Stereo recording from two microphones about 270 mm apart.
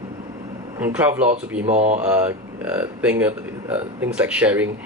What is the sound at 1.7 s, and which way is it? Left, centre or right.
Speech, right.